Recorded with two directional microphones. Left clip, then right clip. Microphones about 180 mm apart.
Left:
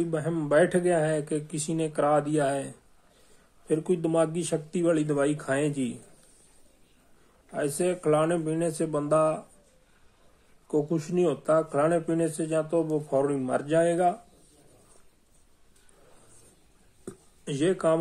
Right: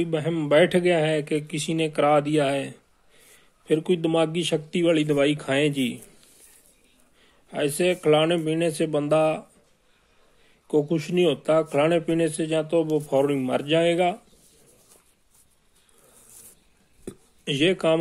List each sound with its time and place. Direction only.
0.0 s a man's voice: 25° right (ahead or behind)
7.5 s a man's voice: 25° right (ahead or behind)
10.7 s a man's voice: 25° right (ahead or behind)
17.0 s a sound: 25° right (ahead or behind)